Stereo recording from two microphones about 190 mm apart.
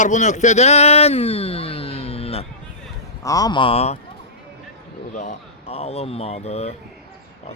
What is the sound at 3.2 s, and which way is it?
Speech, 20° left (ahead or behind).